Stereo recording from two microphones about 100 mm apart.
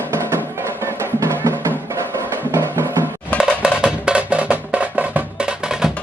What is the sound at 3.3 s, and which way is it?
Music, 5° right (ahead or behind).